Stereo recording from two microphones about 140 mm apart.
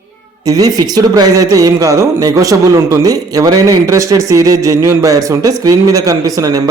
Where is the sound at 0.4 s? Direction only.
25° right (ahead or behind).